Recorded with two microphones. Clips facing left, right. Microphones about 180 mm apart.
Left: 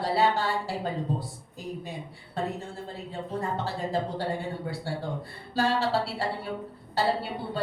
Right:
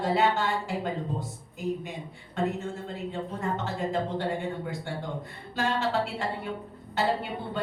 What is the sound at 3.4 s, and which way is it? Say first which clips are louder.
Speech: left 2 dB; 35° left (ahead or behind).